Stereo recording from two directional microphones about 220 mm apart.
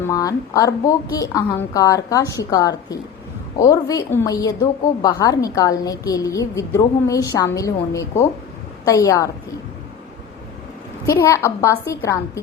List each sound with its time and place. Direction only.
0.0 s a woman's voice: 15° left (ahead or behind)
11.0 s a woman's voice: 15° left (ahead or behind)